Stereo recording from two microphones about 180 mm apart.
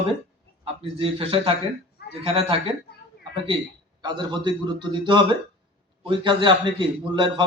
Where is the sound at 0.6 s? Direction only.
30° right (ahead or behind).